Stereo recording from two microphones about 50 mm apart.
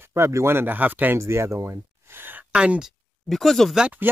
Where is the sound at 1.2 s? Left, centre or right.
Right.